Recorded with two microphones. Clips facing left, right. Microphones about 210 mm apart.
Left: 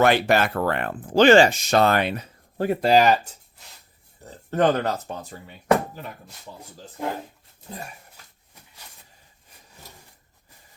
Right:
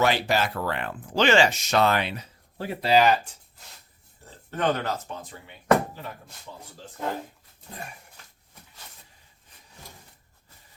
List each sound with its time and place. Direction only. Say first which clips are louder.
0.0 s speech: left 5 dB; 55° left (ahead or behind)
4.3 s speech: left 6 dB; 40° left (ahead or behind)
7.0 s speech: left 2 dB; 10° left (ahead or behind)